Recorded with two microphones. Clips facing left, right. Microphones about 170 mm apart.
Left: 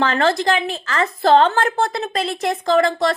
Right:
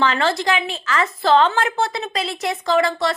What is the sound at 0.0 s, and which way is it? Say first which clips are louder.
Speech: left 2 dB; 45° left (ahead or behind).